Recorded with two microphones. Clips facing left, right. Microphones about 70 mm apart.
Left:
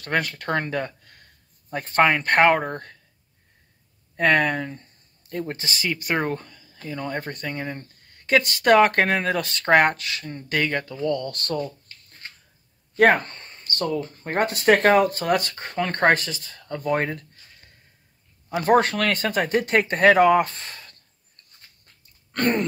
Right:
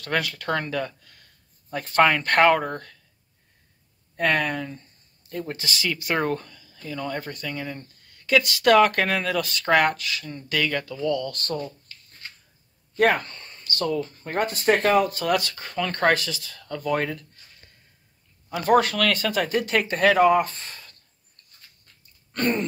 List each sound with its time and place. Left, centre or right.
0.0 s speech: left
2.0 s speech: left
4.2 s speech: left
5.5 s speech: left
7.2 s speech: left
9.4 s speech: left
9.9 s speech: left
10.2 s speech: left
12.9 s a sound: left
13.8 s speech: left
14.4 s speech: left
18.5 s speech: left
22.3 s a sound: left